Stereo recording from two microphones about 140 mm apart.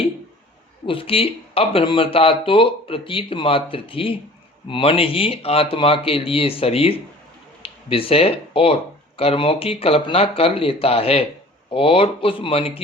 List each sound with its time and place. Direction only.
0.9 s speech: 40° left (ahead or behind)